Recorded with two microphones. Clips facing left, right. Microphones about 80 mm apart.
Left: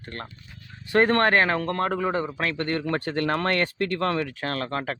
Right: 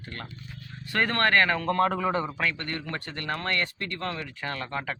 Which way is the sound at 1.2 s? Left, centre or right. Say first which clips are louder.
Left 2 dB; left.